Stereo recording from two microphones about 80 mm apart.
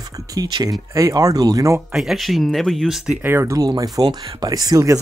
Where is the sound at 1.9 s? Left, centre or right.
Centre.